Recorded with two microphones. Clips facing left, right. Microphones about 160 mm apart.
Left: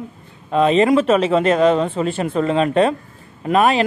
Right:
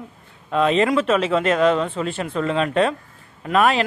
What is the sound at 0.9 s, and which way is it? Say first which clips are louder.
Speech: left 4 dB; 40° left (ahead or behind).